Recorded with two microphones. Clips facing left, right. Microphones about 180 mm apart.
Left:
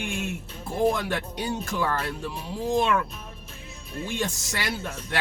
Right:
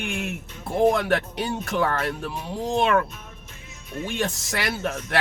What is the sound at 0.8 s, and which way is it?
Speech, 60° right (ahead or behind).